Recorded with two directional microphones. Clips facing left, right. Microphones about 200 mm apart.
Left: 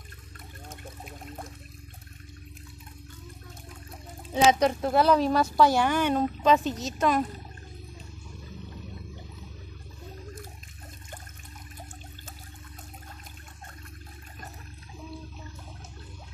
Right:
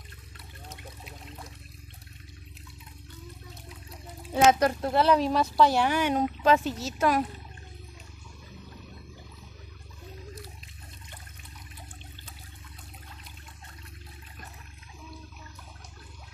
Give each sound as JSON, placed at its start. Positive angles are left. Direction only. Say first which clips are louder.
{"t": 0.7, "sound": "a sound", "louder": "left 2 dB", "side_deg": 45}
{"t": 4.5, "sound": "speech", "louder": "left 1 dB", "side_deg": -5}
{"t": 5.9, "sound": "speech", "louder": "left 1 dB", "side_deg": -10}